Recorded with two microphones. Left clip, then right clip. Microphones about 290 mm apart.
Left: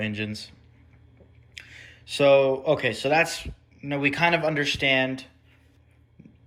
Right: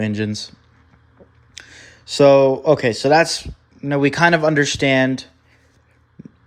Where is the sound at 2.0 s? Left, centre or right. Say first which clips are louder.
Right 7 dB; right.